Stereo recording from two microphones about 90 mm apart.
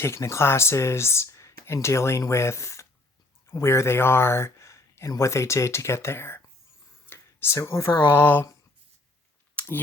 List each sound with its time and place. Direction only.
0.0 s speech: 30° left (ahead or behind)
9.6 s scissors: 15° left (ahead or behind)